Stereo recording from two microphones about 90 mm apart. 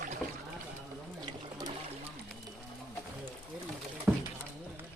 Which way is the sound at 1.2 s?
50° right (ahead or behind).